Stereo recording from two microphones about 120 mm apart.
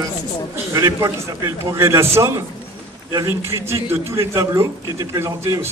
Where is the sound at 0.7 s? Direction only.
25° right (ahead or behind).